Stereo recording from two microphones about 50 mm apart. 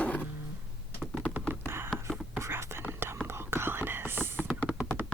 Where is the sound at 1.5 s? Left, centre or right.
Right.